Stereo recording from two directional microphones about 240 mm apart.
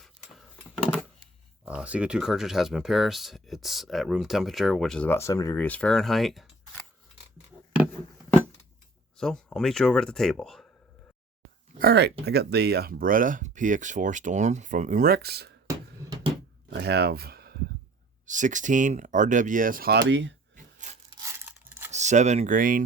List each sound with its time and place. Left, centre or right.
1.6 s speech: centre
9.1 s speech: centre
11.8 s speech: right
16.0 s a sound: centre
16.6 s a sound: right
18.3 s speech: right
20.8 s sawing: right
21.2 s crumpling: centre
21.9 s speech: right